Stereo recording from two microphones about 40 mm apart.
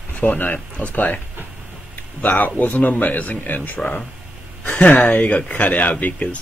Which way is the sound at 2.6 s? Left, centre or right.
Left.